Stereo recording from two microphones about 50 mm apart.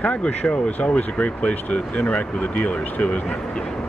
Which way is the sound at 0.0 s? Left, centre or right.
Left.